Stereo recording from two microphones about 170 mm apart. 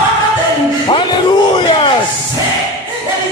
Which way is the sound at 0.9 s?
30° left (ahead or behind).